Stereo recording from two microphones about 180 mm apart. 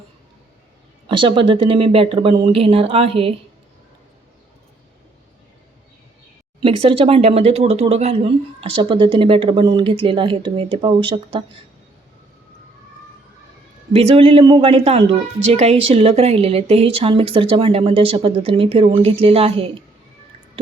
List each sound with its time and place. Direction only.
1.0 s speech: 30° right (ahead or behind)
6.6 s speech: 30° right (ahead or behind)
13.9 s speech: 35° right (ahead or behind)